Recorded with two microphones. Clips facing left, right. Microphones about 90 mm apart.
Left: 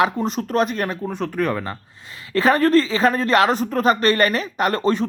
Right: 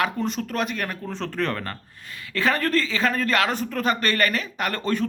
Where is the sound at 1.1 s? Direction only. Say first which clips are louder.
Left 3 dB; 10° left (ahead or behind).